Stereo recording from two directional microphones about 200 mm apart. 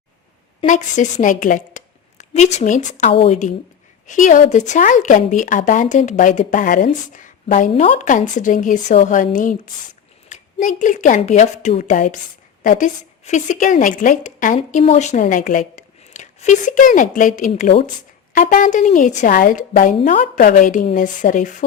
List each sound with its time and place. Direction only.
0.6 s a woman's voice: 40° left (ahead or behind)
17.5 s speech: 30° left (ahead or behind)
18.3 s speech: 40° left (ahead or behind)